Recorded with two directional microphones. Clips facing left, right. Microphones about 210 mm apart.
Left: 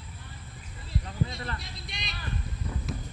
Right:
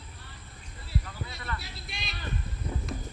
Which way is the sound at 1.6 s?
Centre (ahead or behind).